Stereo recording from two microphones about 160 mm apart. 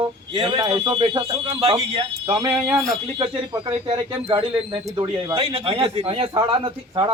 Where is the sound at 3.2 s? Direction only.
30° right (ahead or behind).